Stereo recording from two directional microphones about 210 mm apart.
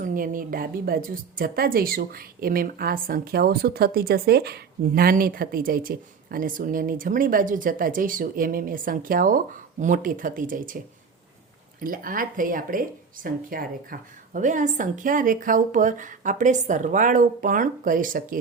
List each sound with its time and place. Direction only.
0.0 s a woman's voice: 40° right (ahead or behind)
11.8 s a woman's voice: 40° right (ahead or behind)